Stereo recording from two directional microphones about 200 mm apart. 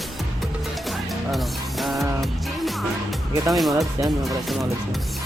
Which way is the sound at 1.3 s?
Centre (ahead or behind).